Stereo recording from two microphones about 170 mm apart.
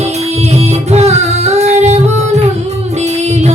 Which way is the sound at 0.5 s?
40° right (ahead or behind).